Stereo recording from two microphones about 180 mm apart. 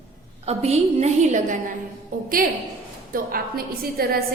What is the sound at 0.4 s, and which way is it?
A woman's voice, 35° right (ahead or behind).